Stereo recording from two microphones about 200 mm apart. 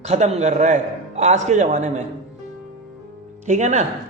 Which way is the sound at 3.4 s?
35° right (ahead or behind).